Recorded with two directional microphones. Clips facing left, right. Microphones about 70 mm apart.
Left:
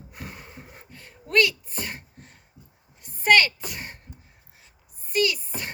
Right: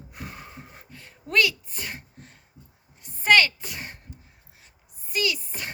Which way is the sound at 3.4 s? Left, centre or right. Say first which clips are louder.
Right 1 dB; left.